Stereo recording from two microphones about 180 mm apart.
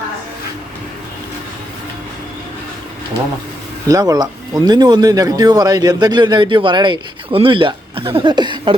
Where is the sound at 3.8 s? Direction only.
20° right (ahead or behind).